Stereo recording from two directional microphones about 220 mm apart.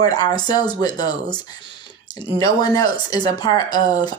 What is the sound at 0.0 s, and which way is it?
Speech, 15° left (ahead or behind).